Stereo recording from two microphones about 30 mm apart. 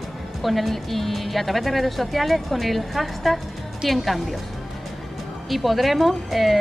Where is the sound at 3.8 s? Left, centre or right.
Centre.